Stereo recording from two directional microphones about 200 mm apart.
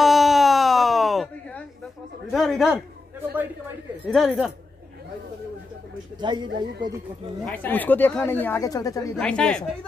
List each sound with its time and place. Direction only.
0.0 s a sound: centre (ahead or behind)
2.3 s speech: centre (ahead or behind)
4.1 s speech: centre (ahead or behind)
6.2 s speech: 20° right (ahead or behind)
7.4 s speech: 10° left (ahead or behind)
9.1 s speech: 5° left (ahead or behind)